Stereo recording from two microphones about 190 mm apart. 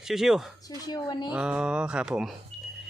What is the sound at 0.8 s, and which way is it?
Speech, 20° left (ahead or behind).